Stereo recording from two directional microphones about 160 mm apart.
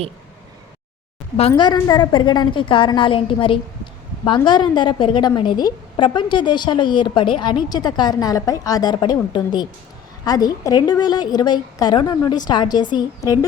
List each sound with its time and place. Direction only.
1.4 s a woman's voice: 35° left (ahead or behind)